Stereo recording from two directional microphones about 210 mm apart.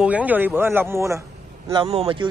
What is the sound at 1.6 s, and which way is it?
Speech, 25° right (ahead or behind).